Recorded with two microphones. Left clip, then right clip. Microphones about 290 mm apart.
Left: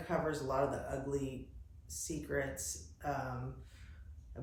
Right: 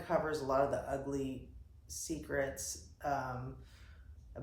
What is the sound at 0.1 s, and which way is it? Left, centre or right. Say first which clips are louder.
Speech: right 3 dB; centre.